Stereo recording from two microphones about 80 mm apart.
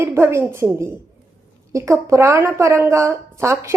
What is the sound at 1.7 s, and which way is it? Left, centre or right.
A woman's voice, right.